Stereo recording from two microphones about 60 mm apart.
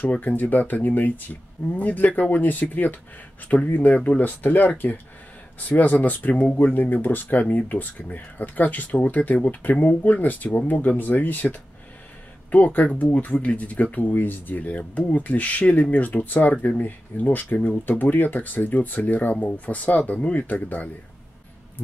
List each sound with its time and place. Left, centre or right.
0.3 s speech: left
12.4 s speech: left